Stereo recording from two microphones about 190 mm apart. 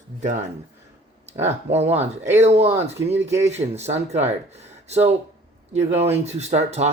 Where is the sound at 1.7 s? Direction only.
35° right (ahead or behind).